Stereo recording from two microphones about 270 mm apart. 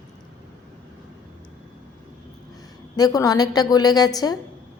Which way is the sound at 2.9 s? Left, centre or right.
Centre.